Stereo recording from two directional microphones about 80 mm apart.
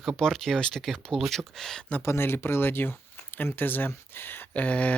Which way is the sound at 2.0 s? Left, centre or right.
Left.